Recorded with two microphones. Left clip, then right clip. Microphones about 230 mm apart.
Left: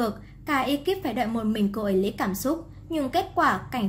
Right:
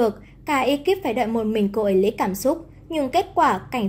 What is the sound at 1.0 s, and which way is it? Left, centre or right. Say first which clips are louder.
Speech: right 5 dB; left.